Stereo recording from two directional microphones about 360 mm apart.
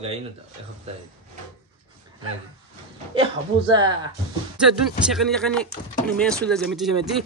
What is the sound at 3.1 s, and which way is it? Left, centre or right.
Speech, centre.